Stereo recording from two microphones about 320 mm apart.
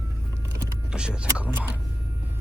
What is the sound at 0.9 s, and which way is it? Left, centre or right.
Speech, centre.